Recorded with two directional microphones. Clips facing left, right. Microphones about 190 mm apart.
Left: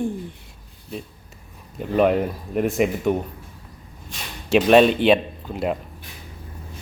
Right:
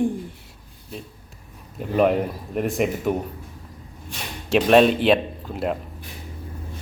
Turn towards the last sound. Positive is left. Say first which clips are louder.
# left 1 dB
turn(degrees=0)  # may be behind; listen again after turning